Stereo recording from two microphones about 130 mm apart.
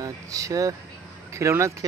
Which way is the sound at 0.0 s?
25° right (ahead or behind).